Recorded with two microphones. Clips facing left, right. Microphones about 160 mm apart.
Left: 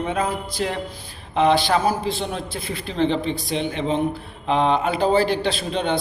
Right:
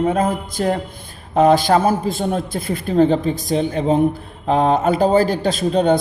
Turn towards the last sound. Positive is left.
turn(degrees=-45)  # may be behind; listen again after turning